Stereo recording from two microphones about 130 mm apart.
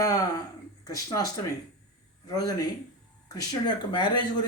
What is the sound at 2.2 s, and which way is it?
A man's voice, 30° left (ahead or behind).